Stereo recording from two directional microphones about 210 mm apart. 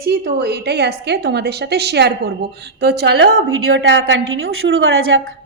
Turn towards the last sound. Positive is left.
turn(degrees=-70)  # may be behind; listen again after turning